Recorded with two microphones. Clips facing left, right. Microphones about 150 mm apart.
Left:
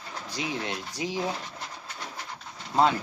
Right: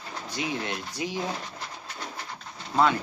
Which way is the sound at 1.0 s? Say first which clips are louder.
Left 1 dB; 25° left (ahead or behind).